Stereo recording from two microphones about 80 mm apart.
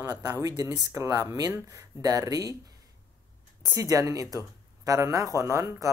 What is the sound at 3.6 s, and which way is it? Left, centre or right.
Speech, right.